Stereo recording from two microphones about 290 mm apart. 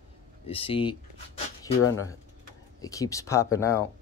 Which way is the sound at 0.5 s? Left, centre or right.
Centre.